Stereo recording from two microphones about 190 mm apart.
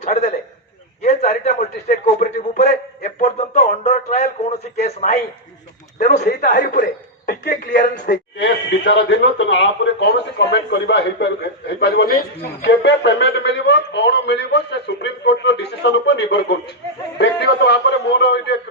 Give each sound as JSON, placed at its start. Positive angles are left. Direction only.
{"t": 1.5, "sound": "a sound", "side_deg": 40}
{"t": 6.2, "sound": "a man's voice", "side_deg": 55}
{"t": 8.1, "sound": "a man's voice", "side_deg": 65}